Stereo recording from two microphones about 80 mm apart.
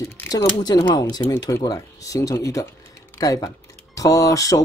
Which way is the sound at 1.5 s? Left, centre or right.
Left.